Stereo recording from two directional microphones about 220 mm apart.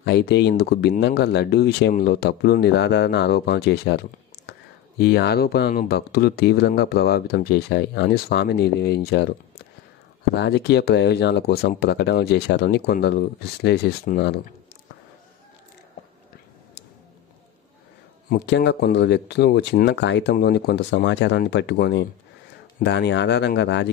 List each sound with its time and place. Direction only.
0.0 s speech: 50° left (ahead or behind)
10.3 s speech: 50° left (ahead or behind)
18.3 s speech: 50° left (ahead or behind)